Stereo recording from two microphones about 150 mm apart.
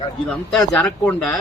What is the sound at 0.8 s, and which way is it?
Speech, 10° left (ahead or behind).